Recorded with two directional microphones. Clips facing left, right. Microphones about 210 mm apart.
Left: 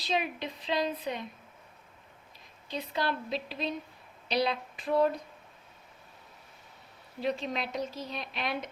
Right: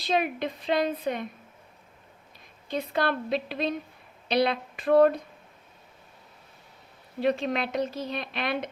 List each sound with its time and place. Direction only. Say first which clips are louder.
0.0 s a woman's voice: right 5 dB; 55° right (ahead or behind)
2.6 s a woman's voice: right 5 dB; 55° right (ahead or behind)
7.2 s a woman's voice: right 6 dB; 60° right (ahead or behind)